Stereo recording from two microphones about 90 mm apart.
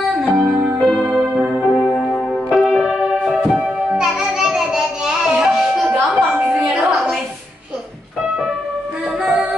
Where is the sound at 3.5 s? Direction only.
5° right (ahead or behind).